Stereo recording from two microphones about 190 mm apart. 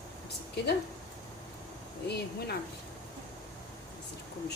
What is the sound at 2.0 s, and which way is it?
Speech, 60° left (ahead or behind).